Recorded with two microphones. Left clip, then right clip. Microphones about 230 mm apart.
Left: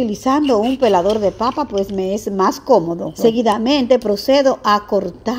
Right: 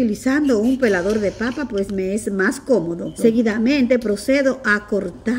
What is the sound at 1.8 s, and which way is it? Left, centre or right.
A woman's voice, centre.